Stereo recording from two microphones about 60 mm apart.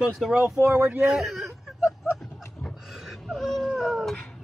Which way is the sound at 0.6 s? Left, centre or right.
Right.